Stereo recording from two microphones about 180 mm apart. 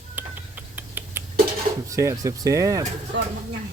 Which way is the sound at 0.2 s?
10° right (ahead or behind).